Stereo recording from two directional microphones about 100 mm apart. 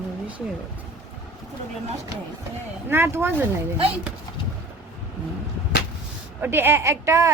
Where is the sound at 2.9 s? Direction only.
25° right (ahead or behind).